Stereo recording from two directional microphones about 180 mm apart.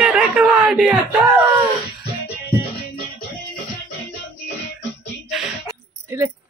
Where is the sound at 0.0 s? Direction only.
10° right (ahead or behind).